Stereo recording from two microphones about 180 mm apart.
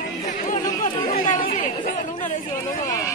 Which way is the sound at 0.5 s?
45° left (ahead or behind).